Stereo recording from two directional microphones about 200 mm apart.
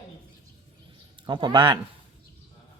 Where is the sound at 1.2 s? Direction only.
20° right (ahead or behind).